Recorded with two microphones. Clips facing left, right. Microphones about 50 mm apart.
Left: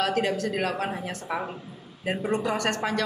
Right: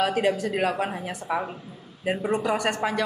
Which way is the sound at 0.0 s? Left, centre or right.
Centre.